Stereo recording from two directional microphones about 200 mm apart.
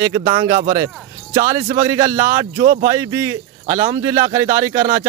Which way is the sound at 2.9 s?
15° right (ahead or behind).